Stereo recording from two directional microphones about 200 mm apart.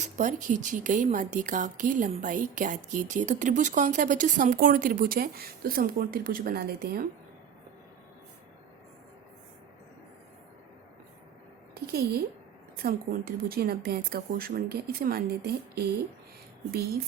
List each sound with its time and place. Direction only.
0.0 s a woman's voice: 40° right (ahead or behind)
11.7 s a sound: 50° right (ahead or behind)
12.8 s speech: 45° right (ahead or behind)